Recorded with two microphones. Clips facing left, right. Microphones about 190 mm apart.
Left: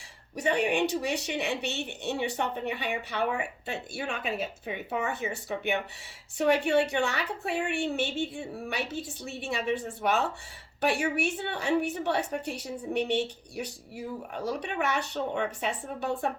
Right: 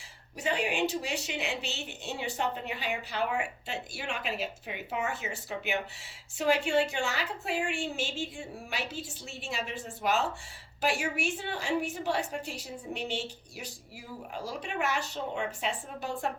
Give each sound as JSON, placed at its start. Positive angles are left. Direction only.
{"t": 0.3, "sound": "a woman's voice", "side_deg": 60}
{"t": 14.3, "sound": "a woman's voice", "side_deg": 65}